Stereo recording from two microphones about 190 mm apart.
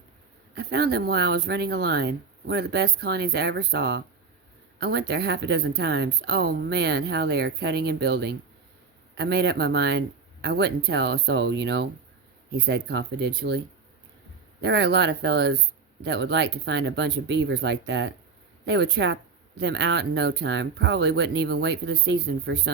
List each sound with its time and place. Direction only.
0.5 s speech: 60° right (ahead or behind)
14.6 s speech: 60° right (ahead or behind)